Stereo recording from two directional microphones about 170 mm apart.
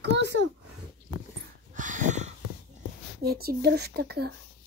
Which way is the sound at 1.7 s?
50° right (ahead or behind).